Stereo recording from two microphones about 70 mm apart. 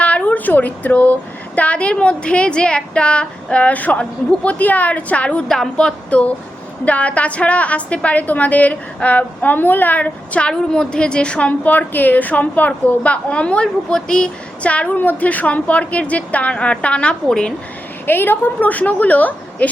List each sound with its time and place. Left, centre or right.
0.0 s a sound: centre
1.5 s a woman's voice: centre
5.5 s a woman's voice: centre
5.7 s a woman's voice: centre
10.5 s a woman's voice: centre
18.0 s a woman's voice: left